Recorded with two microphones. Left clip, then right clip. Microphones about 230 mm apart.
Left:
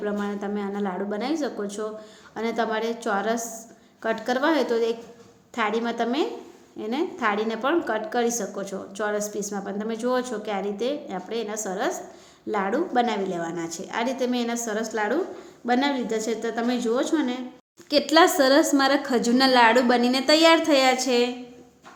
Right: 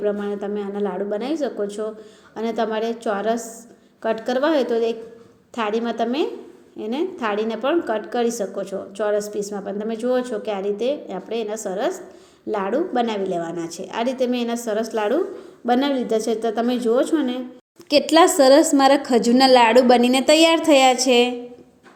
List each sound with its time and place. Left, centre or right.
0.0 s a woman's voice: centre